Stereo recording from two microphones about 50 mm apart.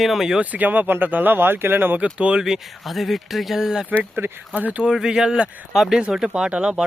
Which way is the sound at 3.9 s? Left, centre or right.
Right.